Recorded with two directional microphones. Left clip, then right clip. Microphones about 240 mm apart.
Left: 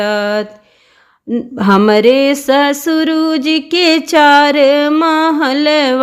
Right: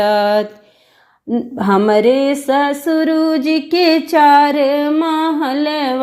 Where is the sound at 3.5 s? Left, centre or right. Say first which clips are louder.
Left 3 dB; left.